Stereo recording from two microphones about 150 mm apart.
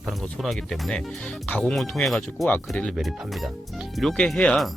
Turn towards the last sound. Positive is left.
turn(degrees=5)  # may be behind; listen again after turning